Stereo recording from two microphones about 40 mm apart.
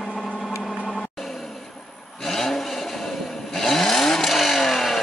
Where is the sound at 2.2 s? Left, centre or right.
Centre.